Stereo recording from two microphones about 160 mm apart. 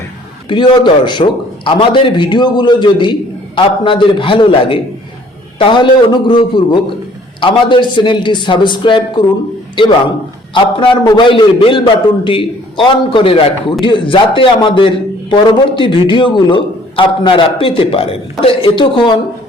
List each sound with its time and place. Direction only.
0.4 s a man's voice: 30° left (ahead or behind)
10.5 s a man's voice: 25° left (ahead or behind)